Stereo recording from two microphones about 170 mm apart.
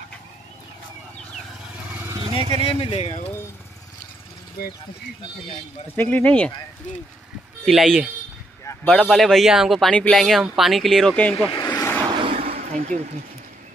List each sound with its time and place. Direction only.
1.9 s vehicle: 10° right (ahead or behind)
2.5 s speech: 35° left (ahead or behind)
4.6 s speech: 65° left (ahead or behind)
5.9 s speech: 10° left (ahead or behind)
7.6 s speech: centre (ahead or behind)
11.5 s vehicle: 20° left (ahead or behind)
12.0 s a sound: 30° right (ahead or behind)